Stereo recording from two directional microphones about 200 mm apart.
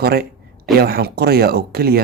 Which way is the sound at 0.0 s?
50° right (ahead or behind).